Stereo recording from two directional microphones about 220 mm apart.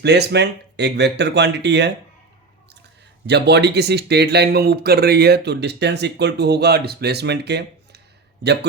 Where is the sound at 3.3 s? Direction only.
50° right (ahead or behind).